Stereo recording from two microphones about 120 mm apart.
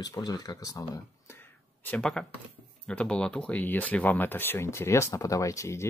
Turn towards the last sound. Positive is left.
turn(degrees=25)  # may be behind; listen again after turning